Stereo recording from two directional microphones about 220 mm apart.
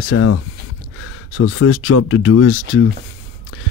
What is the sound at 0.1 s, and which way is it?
Speech, 90° left.